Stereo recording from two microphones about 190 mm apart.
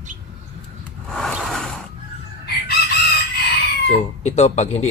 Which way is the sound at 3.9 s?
35° left (ahead or behind).